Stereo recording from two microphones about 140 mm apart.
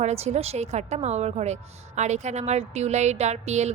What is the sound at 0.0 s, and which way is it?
A woman's voice, 50° right (ahead or behind).